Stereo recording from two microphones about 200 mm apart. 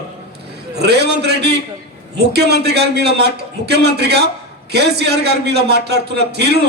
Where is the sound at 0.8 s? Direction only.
55° right (ahead or behind).